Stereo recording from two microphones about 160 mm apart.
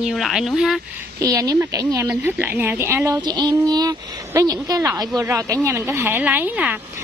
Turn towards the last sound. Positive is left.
turn(degrees=-10)  # may be behind; listen again after turning